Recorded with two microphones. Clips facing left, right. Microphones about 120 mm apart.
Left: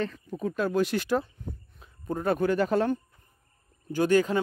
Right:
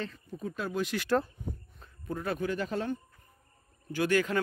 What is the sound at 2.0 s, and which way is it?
Speech, 45° left (ahead or behind).